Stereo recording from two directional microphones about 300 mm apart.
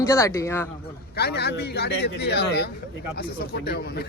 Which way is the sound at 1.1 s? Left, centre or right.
Left.